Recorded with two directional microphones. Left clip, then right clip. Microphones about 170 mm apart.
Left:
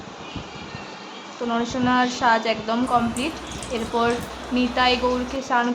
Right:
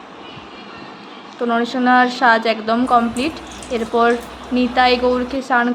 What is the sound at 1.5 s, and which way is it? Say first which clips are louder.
A woman's voice: right 7 dB; 20° right (ahead or behind).